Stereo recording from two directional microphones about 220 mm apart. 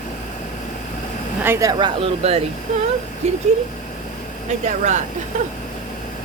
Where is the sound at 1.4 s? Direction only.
10° right (ahead or behind); by 3.4 s 30° right (ahead or behind).